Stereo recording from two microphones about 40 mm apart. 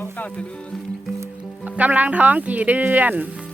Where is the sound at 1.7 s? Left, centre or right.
Right.